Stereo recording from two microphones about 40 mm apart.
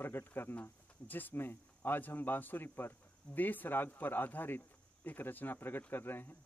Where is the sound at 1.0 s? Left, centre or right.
Left.